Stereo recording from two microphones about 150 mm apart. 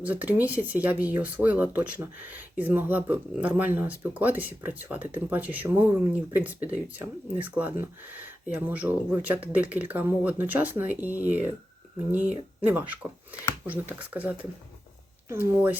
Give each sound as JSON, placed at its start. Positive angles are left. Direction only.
{"t": 0.0, "sound": "speech", "side_deg": -10}
{"t": 12.6, "sound": "speech", "side_deg": -10}